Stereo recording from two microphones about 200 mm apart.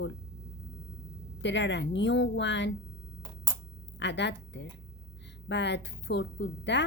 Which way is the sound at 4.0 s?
60° left (ahead or behind).